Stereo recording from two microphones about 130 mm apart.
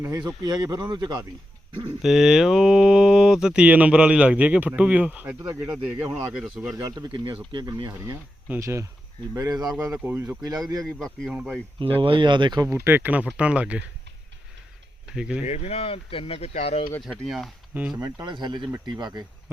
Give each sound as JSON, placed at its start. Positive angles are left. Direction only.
{"t": 0.4, "sound": "speech", "side_deg": -35}
{"t": 2.0, "sound": "a man's voice", "side_deg": 0}
{"t": 6.7, "sound": "speech", "side_deg": -25}
{"t": 10.0, "sound": "a man's voice", "side_deg": -10}
{"t": 11.3, "sound": "speech", "side_deg": -10}
{"t": 11.9, "sound": "speech", "side_deg": -40}
{"t": 12.6, "sound": "speech", "side_deg": -20}
{"t": 15.0, "sound": "speech", "side_deg": -5}
{"t": 15.4, "sound": "speech", "side_deg": 55}
{"t": 17.0, "sound": "a man's voice", "side_deg": 0}
{"t": 18.0, "sound": "speech", "side_deg": -35}